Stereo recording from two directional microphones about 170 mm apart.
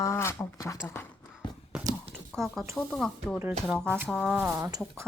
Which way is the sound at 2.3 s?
Centre (ahead or behind).